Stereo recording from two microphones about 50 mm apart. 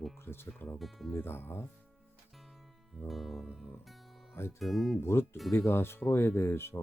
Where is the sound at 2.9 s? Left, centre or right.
Centre.